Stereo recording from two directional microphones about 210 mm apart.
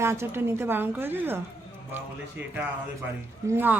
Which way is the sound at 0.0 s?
10° right (ahead or behind).